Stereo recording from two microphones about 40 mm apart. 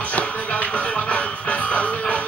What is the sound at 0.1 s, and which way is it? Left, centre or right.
Music, left.